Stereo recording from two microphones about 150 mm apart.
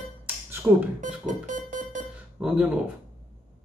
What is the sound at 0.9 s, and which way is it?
Music, 60° right (ahead or behind).